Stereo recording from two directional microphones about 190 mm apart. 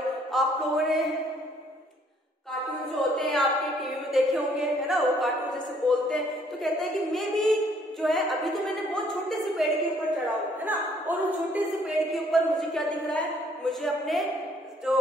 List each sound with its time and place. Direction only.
0.3 s speech: centre (ahead or behind)
3.0 s a sound: centre (ahead or behind)
4.6 s speech: centre (ahead or behind)